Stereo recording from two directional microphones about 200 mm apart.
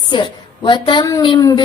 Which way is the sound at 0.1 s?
20° left (ahead or behind).